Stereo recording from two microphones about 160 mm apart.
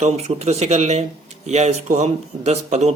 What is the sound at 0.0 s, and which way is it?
Speech, 40° right (ahead or behind).